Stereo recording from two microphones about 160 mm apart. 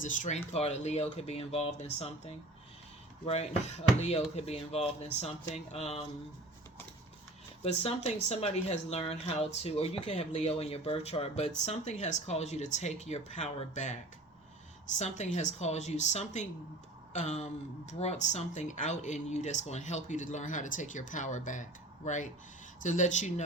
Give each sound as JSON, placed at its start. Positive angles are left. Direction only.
{"t": 0.0, "sound": "speech", "side_deg": 50}
{"t": 4.0, "sound": "speech", "side_deg": 40}
{"t": 7.6, "sound": "speech", "side_deg": 40}
{"t": 14.9, "sound": "speech", "side_deg": 45}